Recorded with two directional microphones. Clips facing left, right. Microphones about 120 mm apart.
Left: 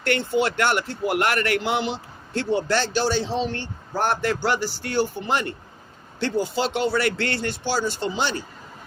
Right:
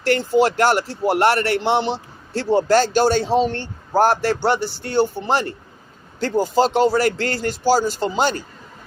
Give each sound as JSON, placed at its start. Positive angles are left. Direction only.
{"t": 0.0, "sound": "speech", "side_deg": -40}